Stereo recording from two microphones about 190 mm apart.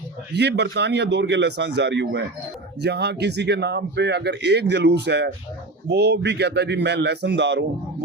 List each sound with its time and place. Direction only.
0.3 s speech: 60° right (ahead or behind)